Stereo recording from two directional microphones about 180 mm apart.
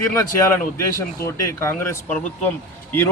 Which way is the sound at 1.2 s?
15° left (ahead or behind).